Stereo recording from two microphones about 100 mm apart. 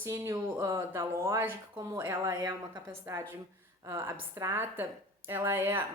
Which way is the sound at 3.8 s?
25° right (ahead or behind).